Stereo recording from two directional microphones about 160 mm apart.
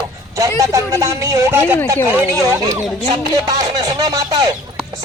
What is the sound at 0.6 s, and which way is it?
Music, 20° right (ahead or behind).